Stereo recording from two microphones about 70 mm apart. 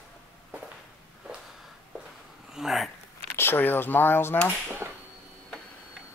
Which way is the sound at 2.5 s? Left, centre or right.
Centre.